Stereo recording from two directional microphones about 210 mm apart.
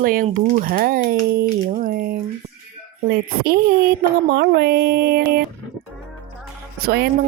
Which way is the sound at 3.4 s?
45° right (ahead or behind).